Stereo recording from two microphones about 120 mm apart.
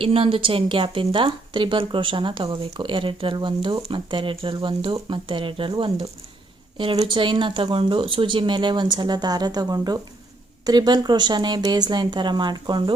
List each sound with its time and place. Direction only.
0.0 s a woman's voice: 50° right (ahead or behind)